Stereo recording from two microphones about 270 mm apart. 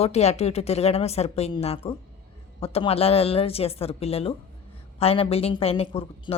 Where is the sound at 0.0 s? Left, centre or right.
Left.